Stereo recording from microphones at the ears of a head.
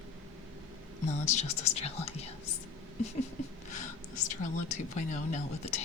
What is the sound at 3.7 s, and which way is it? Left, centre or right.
Speech, left.